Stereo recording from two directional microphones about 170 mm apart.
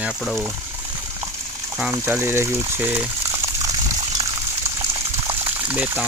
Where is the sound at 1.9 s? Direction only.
15° right (ahead or behind).